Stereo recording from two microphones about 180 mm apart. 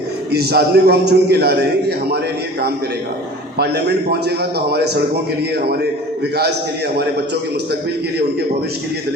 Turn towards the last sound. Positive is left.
turn(degrees=-65)  # may be behind; listen again after turning